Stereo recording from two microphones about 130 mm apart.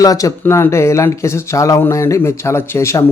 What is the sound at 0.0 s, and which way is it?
Speech, 25° left (ahead or behind).